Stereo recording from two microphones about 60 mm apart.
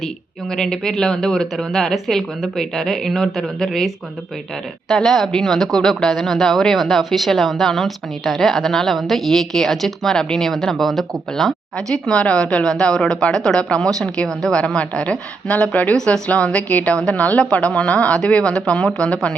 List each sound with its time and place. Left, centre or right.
0.5 s a woman's voice: centre
12.1 s speech: centre
16.0 s speech: centre